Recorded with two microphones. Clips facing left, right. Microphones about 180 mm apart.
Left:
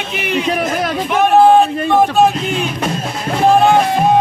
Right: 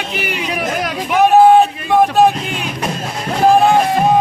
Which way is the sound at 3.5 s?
Centre (ahead or behind).